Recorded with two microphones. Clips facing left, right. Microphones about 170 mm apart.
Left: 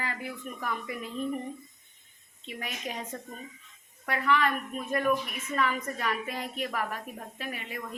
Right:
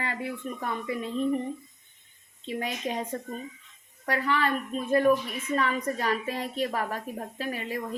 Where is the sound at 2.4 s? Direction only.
30° right (ahead or behind).